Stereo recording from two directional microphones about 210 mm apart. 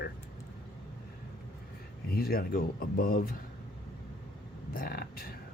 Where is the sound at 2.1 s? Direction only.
45° left (ahead or behind).